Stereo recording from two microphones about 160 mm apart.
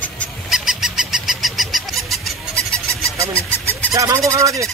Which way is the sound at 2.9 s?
20° right (ahead or behind).